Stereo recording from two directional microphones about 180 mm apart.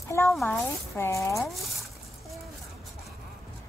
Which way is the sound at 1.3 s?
Centre (ahead or behind).